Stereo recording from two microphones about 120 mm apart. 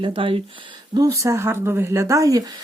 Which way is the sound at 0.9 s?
30° right (ahead or behind).